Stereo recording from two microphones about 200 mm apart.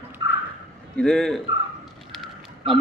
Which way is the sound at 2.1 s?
Centre (ahead or behind).